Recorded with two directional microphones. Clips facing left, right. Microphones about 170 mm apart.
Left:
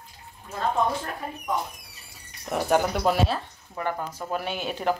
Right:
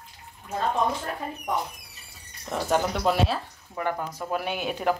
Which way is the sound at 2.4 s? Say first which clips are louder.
Left 2 dB; 10° left (ahead or behind).